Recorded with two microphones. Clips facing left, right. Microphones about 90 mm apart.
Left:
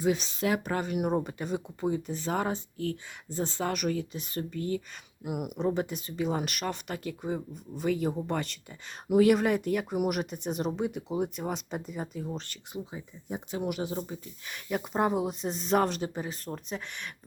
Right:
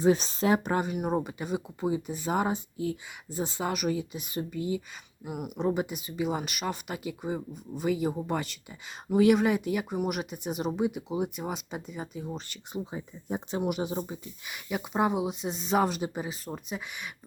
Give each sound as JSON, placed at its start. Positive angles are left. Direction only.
{"t": 0.0, "sound": "speech", "side_deg": -35}
{"t": 1.1, "sound": "speech", "side_deg": -5}
{"t": 5.2, "sound": "speech", "side_deg": 5}
{"t": 12.7, "sound": "speech", "side_deg": -30}
{"t": 13.6, "sound": "speech", "side_deg": -20}